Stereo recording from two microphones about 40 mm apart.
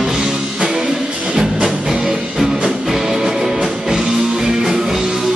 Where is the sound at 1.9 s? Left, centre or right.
Centre.